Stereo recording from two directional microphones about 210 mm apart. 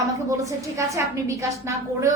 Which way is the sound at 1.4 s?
15° right (ahead or behind).